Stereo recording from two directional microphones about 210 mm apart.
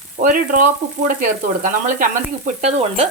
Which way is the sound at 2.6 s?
30° right (ahead or behind).